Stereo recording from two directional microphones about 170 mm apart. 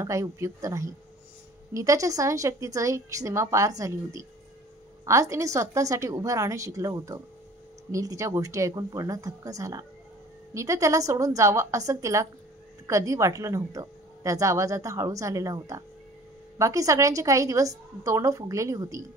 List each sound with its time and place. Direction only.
0.0 s a woman's voice: 15° right (ahead or behind)